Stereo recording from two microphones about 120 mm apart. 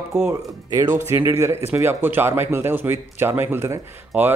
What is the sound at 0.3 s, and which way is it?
A man's voice, 20° right (ahead or behind).